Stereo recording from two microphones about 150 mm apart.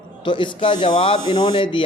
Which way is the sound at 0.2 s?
30° left (ahead or behind).